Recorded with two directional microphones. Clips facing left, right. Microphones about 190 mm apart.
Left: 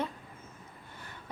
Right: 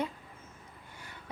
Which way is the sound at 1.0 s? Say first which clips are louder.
Even; 10° right (ahead or behind).